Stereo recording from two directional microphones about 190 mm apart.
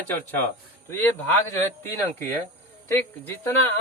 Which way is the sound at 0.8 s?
10° left (ahead or behind).